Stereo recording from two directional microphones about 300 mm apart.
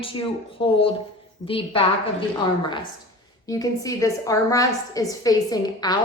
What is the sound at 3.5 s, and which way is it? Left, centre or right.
A woman's voice, centre.